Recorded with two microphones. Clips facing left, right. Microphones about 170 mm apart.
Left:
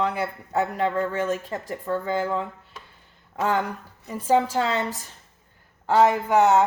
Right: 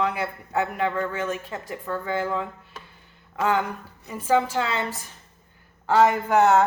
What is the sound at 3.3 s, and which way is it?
A man's voice, 35° left (ahead or behind).